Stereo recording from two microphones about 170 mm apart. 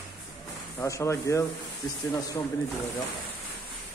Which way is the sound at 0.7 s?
15° left (ahead or behind).